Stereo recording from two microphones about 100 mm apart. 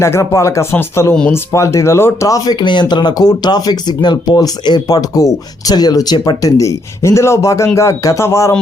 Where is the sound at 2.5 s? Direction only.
50° left (ahead or behind).